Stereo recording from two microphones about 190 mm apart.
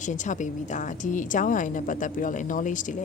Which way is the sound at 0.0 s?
40° left (ahead or behind).